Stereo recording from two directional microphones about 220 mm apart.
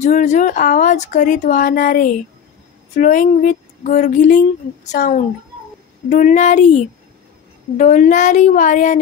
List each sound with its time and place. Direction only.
0.0 s speech: 35° left (ahead or behind)